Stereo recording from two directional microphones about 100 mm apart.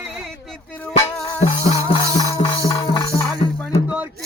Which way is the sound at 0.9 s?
90° left.